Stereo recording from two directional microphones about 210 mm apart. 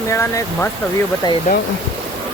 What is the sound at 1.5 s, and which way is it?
Speech, 40° left (ahead or behind).